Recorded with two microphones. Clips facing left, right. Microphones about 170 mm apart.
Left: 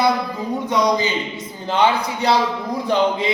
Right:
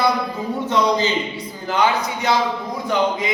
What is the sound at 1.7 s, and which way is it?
A man's voice, 30° left (ahead or behind).